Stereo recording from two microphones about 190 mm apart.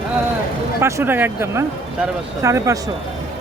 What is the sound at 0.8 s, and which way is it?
Speech, 10° right (ahead or behind).